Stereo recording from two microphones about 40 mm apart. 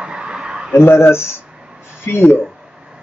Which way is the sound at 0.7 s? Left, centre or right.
Left.